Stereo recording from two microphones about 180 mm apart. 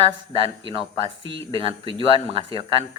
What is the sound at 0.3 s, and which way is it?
Speech, 30° right (ahead or behind).